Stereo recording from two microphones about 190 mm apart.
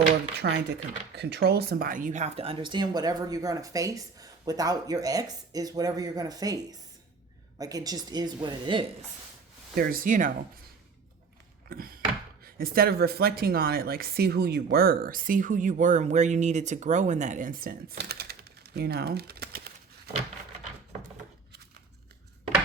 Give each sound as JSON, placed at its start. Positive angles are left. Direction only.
{"t": 0.4, "sound": "speech", "side_deg": -70}
{"t": 9.7, "sound": "speech", "side_deg": -50}
{"t": 11.7, "sound": "a sound", "side_deg": -50}
{"t": 12.5, "sound": "speech", "side_deg": -50}